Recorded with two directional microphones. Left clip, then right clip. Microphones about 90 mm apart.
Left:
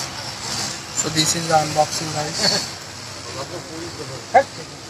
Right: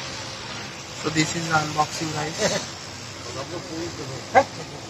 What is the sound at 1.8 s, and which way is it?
Speech, 35° right (ahead or behind).